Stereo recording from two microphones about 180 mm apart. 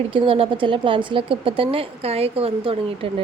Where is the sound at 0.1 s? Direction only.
30° right (ahead or behind).